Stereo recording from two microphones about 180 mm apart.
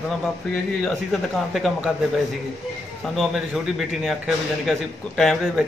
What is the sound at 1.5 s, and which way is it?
Speech, centre (ahead or behind).